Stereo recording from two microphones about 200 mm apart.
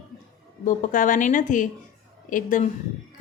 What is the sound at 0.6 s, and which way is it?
A woman's voice, 40° left (ahead or behind).